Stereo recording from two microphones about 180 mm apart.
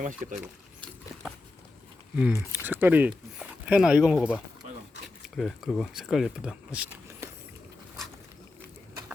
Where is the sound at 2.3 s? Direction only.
10° right (ahead or behind).